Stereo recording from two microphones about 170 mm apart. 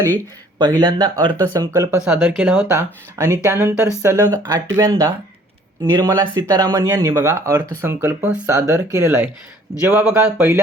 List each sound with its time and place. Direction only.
0.6 s speech: 25° right (ahead or behind)
2.0 s speech: 5° right (ahead or behind)